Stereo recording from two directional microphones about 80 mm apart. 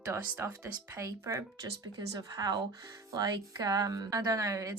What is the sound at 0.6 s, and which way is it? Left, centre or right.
A woman's voice, right.